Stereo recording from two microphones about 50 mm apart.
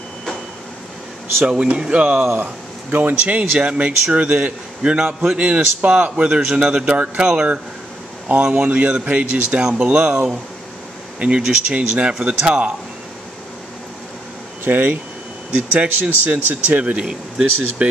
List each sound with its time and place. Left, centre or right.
1.4 s a man's voice: right
2.4 s a man's voice: right
9.6 s speech: centre
9.8 s a man's voice: right
14.6 s speech: right
15.7 s speech: right
16.9 s speech: centre